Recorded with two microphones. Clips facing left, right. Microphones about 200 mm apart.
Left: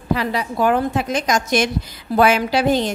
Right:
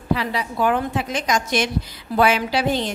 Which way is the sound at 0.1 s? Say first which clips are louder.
Left 2 dB; 45° left (ahead or behind).